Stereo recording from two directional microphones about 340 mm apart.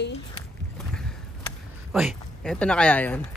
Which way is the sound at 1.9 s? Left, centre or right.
Centre.